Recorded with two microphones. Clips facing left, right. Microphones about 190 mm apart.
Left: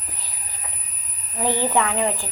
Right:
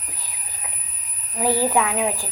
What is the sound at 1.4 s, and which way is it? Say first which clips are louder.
Speech: right 1 dB; 10° right (ahead or behind).